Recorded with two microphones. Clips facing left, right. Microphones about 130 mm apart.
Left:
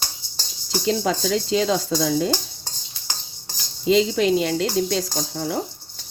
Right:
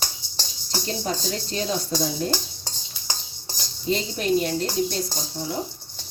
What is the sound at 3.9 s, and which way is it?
Speech, 90° left.